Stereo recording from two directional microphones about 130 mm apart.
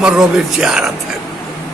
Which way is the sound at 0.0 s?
5° right (ahead or behind).